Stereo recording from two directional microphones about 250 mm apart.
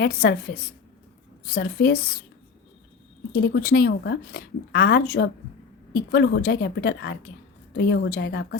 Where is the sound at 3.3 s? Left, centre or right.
Left.